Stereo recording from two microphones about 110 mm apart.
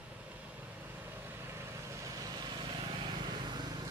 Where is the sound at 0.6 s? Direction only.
15° right (ahead or behind).